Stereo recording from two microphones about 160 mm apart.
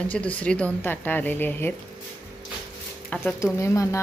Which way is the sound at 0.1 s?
10° left (ahead or behind).